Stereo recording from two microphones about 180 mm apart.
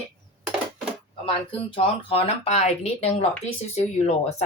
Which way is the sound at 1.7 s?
30° left (ahead or behind).